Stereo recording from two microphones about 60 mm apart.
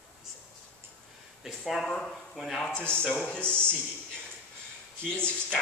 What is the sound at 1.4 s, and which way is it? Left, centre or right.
Speech, centre.